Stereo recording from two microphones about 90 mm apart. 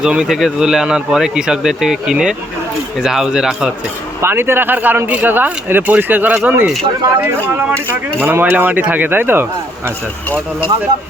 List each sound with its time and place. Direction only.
0.0 s speech: 10° right (ahead or behind)
4.2 s speech: 25° right (ahead or behind)